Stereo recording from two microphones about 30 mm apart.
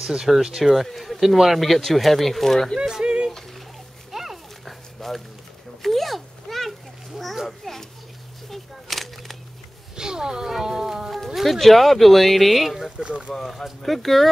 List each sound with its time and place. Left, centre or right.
0.3 s speech: centre
0.8 s speech: centre
1.2 s speech: centre
3.0 s speech: right
4.1 s dog: centre
4.6 s dog: centre
5.8 s a sound: centre
7.4 s speech: centre
8.5 s a sound: centre
9.9 s speech: right
10.4 s speech: centre
11.3 s speech: centre
12.9 s speech: right
13.3 s speech: centre